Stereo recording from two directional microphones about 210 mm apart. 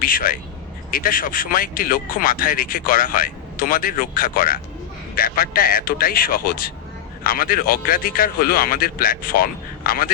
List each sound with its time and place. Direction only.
0.0 s a man's voice: 40° left (ahead or behind)